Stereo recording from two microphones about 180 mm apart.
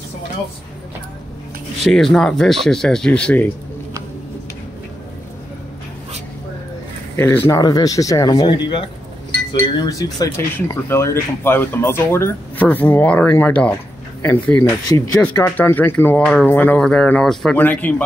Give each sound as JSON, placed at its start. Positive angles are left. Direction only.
{"t": 1.8, "sound": "speech", "side_deg": 0}
{"t": 7.2, "sound": "speech", "side_deg": 15}